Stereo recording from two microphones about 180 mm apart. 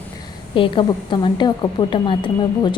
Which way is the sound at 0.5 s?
25° left (ahead or behind).